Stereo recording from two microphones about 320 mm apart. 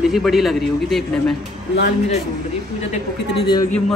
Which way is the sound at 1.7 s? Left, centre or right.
Left.